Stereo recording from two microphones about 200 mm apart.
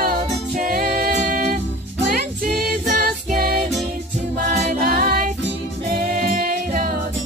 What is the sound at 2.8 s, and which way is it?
Music, 45° right (ahead or behind).